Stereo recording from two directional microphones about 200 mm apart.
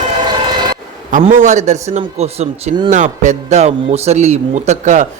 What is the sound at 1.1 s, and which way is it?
Speech, 40° right (ahead or behind).